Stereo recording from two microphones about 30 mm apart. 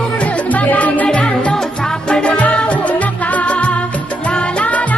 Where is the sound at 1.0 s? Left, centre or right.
Left.